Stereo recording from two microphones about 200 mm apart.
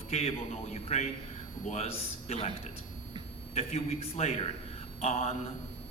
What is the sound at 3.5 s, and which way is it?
A man's voice, 30° left (ahead or behind).